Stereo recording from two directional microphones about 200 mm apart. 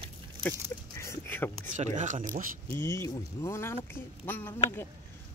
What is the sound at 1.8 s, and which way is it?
Speech, 40° right (ahead or behind).